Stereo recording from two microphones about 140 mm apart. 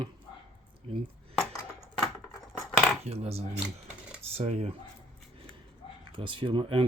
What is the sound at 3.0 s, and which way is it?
Cutlery, 45° right (ahead or behind).